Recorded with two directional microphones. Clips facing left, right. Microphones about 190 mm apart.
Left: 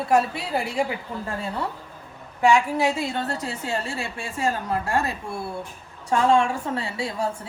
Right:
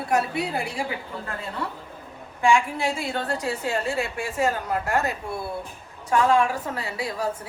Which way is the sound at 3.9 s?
30° left (ahead or behind).